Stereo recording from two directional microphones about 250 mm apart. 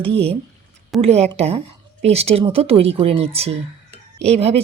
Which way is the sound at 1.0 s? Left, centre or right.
Right.